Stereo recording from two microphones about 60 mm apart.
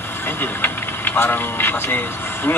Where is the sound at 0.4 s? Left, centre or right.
Left.